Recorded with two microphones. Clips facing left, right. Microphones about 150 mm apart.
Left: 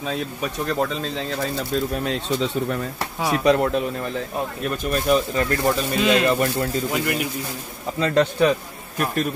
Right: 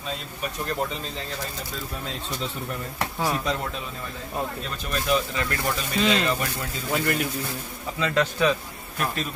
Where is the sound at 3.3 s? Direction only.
70° left (ahead or behind); by 5.7 s 45° left (ahead or behind).